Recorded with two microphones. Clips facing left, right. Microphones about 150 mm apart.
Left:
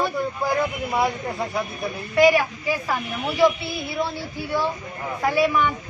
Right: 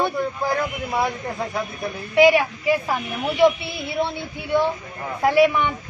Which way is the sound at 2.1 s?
25° right (ahead or behind).